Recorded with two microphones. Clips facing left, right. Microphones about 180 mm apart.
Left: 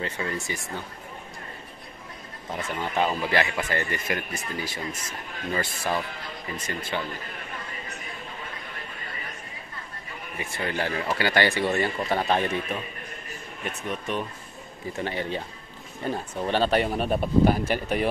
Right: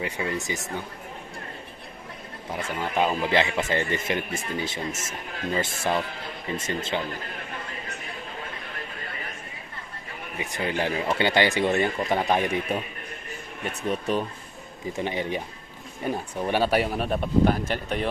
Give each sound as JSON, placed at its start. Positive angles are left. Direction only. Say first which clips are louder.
{"t": 0.0, "sound": "speech", "louder": "right 2 dB", "side_deg": -15}
{"t": 2.5, "sound": "speech", "louder": "right 1 dB", "side_deg": -10}
{"t": 10.4, "sound": "speech", "louder": "right 2 dB", "side_deg": -15}
{"t": 13.8, "sound": "speech", "louder": "right 5 dB", "side_deg": -35}
{"t": 15.0, "sound": "speech", "louder": "right 1 dB", "side_deg": -15}